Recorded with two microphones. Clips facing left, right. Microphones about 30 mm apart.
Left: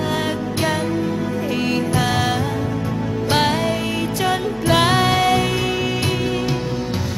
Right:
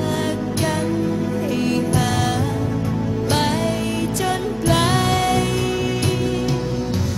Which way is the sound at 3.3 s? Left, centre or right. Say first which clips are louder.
Left 3 dB; centre.